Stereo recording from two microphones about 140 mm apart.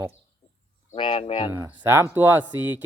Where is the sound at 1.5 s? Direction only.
15° right (ahead or behind).